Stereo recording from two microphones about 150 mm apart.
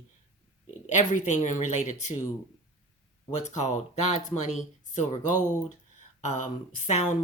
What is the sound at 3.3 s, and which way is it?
Speech, 50° left (ahead or behind).